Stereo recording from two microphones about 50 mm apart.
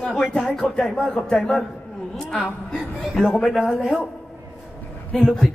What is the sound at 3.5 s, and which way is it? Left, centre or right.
Speech, centre.